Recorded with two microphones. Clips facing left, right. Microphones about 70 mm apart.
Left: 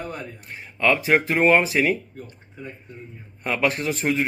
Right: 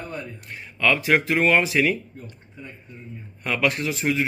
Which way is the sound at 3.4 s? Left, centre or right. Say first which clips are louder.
Even; left.